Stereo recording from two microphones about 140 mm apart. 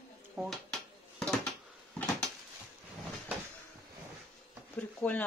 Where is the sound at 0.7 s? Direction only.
5° left (ahead or behind).